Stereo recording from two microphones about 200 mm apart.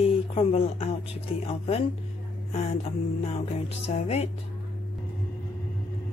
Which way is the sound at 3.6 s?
30° left (ahead or behind).